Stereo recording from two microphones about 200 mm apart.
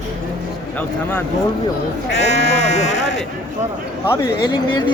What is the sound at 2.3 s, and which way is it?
Speech, 35° left (ahead or behind).